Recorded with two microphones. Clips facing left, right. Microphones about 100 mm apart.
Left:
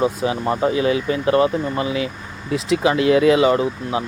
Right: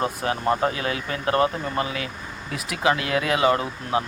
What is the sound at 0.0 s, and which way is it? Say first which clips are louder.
Speech: left 4 dB; 15° left (ahead or behind).